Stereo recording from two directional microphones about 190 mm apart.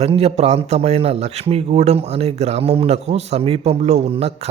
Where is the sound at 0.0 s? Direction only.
30° right (ahead or behind).